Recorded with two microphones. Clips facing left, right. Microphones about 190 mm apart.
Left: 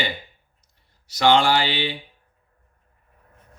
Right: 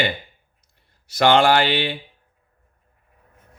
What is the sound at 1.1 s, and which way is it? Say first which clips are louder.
Speech: right 2 dB; 55° right (ahead or behind).